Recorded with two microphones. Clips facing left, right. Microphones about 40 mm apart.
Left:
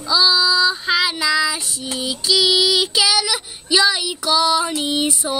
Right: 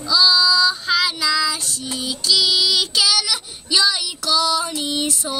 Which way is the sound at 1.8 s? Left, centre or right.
Centre.